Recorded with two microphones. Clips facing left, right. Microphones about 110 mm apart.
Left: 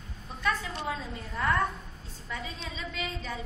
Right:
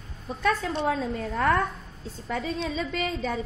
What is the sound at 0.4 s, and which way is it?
A woman's voice, 55° right (ahead or behind).